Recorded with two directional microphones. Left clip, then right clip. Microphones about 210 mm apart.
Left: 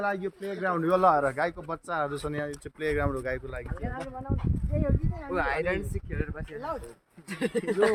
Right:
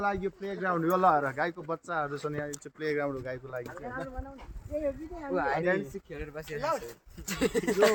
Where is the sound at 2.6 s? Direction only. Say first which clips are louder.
Left 2 dB; 35° left (ahead or behind).